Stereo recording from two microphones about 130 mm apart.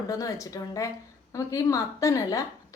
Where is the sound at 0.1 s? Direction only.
25° left (ahead or behind).